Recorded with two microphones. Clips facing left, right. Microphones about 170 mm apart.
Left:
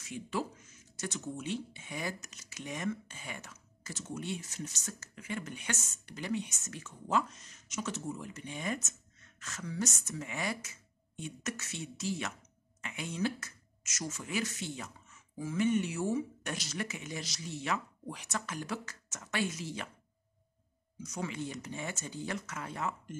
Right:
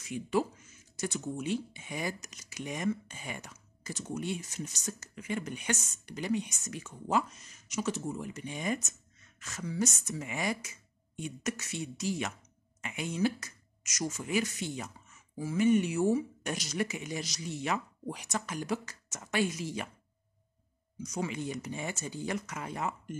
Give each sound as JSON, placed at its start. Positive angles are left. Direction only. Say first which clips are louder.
{"t": 0.1, "sound": "speech", "louder": "right 6 dB", "side_deg": -15}
{"t": 21.0, "sound": "speech", "louder": "right 3 dB", "side_deg": -15}